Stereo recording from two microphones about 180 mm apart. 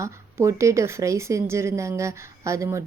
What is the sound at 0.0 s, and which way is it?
A woman's voice, 15° right (ahead or behind).